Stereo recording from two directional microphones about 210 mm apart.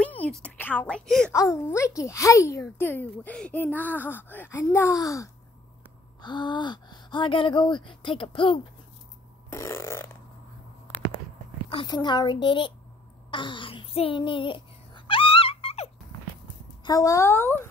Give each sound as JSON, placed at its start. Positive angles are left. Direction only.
{"t": 0.0, "sound": "a woman's voice", "side_deg": 5}
{"t": 1.3, "sound": "a child's voice", "side_deg": 15}
{"t": 9.5, "sound": "burping", "side_deg": 15}
{"t": 11.7, "sound": "speech", "side_deg": 20}
{"t": 13.3, "sound": "a sound", "side_deg": 25}
{"t": 16.8, "sound": "a child's voice", "side_deg": 15}